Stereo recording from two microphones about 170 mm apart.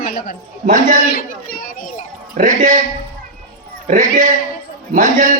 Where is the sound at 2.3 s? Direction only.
45° right (ahead or behind).